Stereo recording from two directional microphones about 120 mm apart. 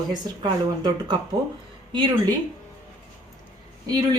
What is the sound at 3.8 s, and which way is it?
Speech, 35° right (ahead or behind).